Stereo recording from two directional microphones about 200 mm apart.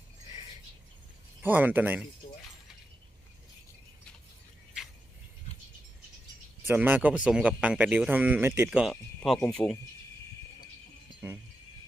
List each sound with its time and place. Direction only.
1.4 s speech: 10° right (ahead or behind)
6.7 s speech: 10° right (ahead or behind)